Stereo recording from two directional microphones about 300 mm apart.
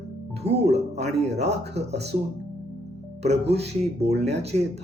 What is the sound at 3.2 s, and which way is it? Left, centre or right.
Speech, right.